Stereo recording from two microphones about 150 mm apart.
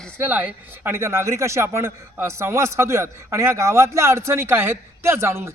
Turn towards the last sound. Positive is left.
turn(degrees=-15)  # may be behind; listen again after turning